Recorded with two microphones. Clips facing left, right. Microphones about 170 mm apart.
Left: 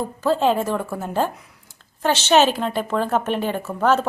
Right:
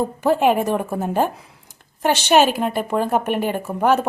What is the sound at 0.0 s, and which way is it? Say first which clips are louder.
A woman's voice: right 2 dB; 15° right (ahead or behind).